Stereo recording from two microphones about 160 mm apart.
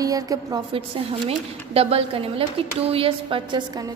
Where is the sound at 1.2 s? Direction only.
40° right (ahead or behind).